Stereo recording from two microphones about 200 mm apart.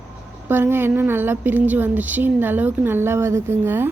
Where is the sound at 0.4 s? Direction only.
10° right (ahead or behind).